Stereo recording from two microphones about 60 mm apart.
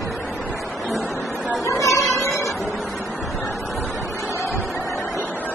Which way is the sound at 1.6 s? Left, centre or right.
Left.